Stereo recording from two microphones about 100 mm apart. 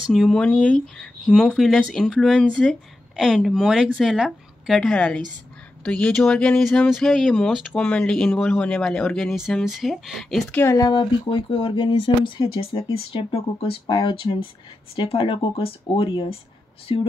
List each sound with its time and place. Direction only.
0.1 s a woman's voice: 5° left (ahead or behind)
10.7 s speech: 45° left (ahead or behind)
11.2 s speech: 60° left (ahead or behind)
13.8 s speech: 50° left (ahead or behind)